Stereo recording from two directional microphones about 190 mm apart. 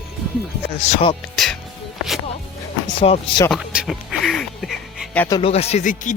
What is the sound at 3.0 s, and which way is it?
Speech, 30° left (ahead or behind).